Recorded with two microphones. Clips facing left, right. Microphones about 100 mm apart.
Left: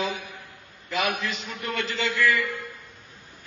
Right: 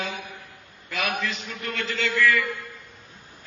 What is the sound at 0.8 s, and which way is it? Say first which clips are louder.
A man's voice: left 1 dB; 20° left (ahead or behind).